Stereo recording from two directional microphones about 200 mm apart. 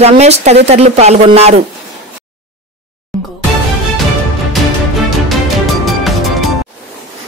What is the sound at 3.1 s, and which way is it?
Music, centre (ahead or behind).